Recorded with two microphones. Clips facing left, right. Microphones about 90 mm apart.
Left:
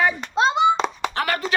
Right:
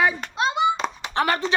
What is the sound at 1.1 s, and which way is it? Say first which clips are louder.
Speech: right 2 dB; 25° right (ahead or behind).